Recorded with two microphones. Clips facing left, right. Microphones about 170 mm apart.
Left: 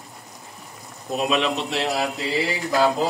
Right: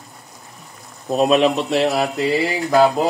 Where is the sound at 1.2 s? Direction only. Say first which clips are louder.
Right 7 dB; 45° right (ahead or behind).